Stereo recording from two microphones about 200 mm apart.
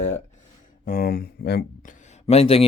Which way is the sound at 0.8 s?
45° left (ahead or behind).